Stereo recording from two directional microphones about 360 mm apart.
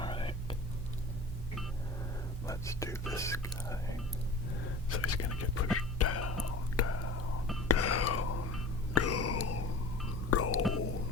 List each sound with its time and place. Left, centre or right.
0.0 s whispering: centre
2.5 s whispering: centre
4.9 s whispering: left
9.0 s a sound: left
10.2 s whispering: left